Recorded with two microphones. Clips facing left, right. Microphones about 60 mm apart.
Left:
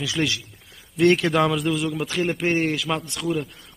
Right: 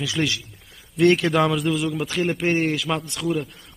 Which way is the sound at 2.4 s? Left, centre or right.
Right.